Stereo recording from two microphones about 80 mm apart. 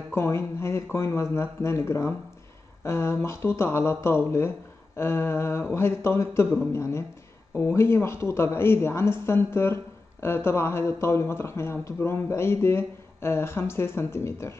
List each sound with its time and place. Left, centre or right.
0.1 s speech: left